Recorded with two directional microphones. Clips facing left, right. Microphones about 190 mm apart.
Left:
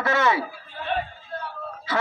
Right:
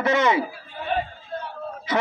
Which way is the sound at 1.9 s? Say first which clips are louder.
Right 2 dB; 20° right (ahead or behind).